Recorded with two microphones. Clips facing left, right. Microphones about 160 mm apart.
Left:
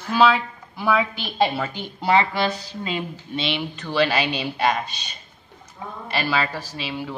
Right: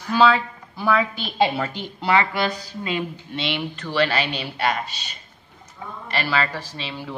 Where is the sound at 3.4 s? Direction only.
15° left (ahead or behind).